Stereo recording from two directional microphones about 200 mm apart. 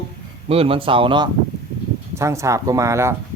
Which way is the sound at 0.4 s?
30° right (ahead or behind).